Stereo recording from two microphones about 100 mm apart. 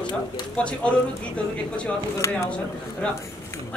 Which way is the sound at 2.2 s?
30° left (ahead or behind).